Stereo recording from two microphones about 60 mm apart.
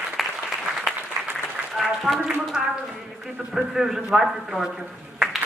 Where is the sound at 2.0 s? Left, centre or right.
Centre.